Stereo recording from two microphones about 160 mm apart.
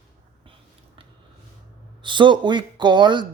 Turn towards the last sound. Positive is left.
turn(degrees=-30)  # may be behind; listen again after turning